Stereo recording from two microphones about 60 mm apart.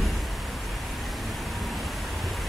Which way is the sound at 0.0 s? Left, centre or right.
Centre.